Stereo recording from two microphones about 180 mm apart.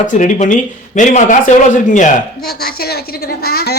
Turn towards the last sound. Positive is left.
turn(degrees=60)  # may be behind; listen again after turning